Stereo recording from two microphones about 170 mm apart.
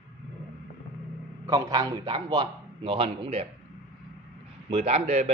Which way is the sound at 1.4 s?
20° right (ahead or behind).